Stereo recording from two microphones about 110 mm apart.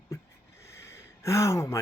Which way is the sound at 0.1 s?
25° left (ahead or behind).